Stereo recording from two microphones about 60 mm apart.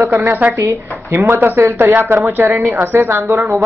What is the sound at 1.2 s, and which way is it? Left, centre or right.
Speech, right.